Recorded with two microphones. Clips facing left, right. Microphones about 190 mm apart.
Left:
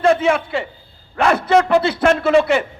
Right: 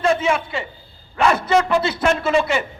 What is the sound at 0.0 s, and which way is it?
A man's voice, 60° left (ahead or behind).